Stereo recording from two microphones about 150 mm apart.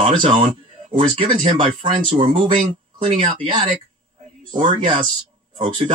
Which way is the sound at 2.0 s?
50° right (ahead or behind).